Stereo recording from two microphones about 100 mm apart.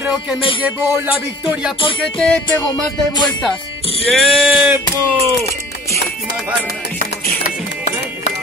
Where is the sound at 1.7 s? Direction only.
60° left (ahead or behind).